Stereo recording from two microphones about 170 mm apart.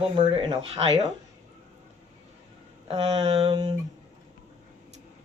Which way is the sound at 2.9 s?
35° right (ahead or behind).